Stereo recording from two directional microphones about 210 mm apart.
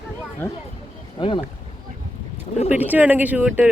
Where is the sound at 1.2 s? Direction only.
20° left (ahead or behind).